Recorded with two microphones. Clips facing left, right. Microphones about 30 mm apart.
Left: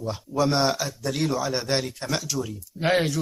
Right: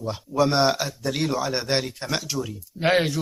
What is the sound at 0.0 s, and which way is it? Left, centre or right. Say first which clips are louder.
A man's voice: right 2 dB; centre.